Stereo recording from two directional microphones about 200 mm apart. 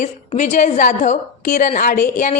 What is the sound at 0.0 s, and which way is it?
A woman's voice, 35° left (ahead or behind).